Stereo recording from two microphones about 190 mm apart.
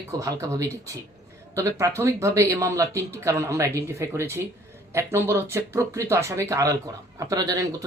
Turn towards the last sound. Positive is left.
turn(degrees=-20)  # may be behind; listen again after turning